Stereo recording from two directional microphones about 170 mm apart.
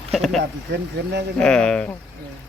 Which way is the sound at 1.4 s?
5° left (ahead or behind).